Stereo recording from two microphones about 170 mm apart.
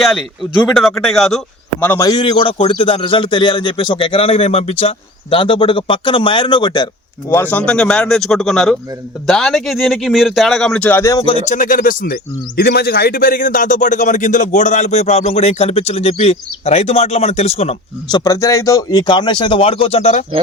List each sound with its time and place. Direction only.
0.0 s speech: centre (ahead or behind)
1.8 s a man's voice: 15° left (ahead or behind)
7.3 s speech: 10° left (ahead or behind)
11.4 s speech: 50° left (ahead or behind)
12.5 s a man's voice: 65° left (ahead or behind); by 17.7 s 40° left (ahead or behind)
18.1 s speech: 20° left (ahead or behind); by 20.2 s 40° left (ahead or behind)